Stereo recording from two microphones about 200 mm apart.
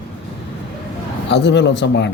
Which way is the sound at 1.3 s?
60° left (ahead or behind).